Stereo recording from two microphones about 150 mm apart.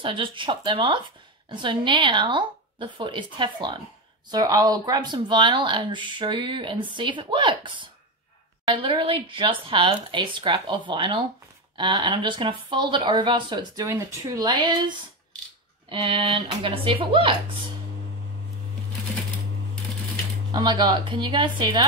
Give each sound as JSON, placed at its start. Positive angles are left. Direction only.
{"t": 0.0, "sound": "speech", "side_deg": -35}
{"t": 20.5, "sound": "a woman's voice", "side_deg": -25}